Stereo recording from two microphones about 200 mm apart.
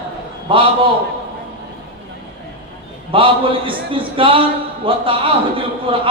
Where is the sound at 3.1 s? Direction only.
25° right (ahead or behind).